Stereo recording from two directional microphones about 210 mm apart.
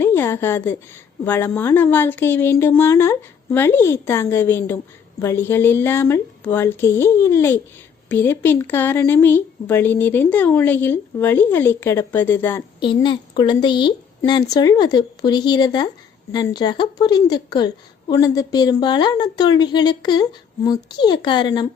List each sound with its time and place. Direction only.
0.0 s a sound: 10° left (ahead or behind)
1.2 s speech: 10° left (ahead or behind)
12.8 s a woman's voice: 20° left (ahead or behind)